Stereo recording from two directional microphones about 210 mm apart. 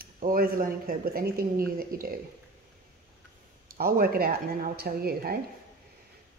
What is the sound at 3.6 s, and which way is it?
Speech, 45° right (ahead or behind).